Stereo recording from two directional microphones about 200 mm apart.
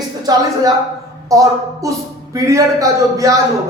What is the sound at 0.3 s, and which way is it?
Speech, 20° right (ahead or behind).